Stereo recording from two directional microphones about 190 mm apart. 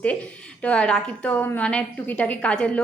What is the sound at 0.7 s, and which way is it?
A woman's voice, 5° left (ahead or behind).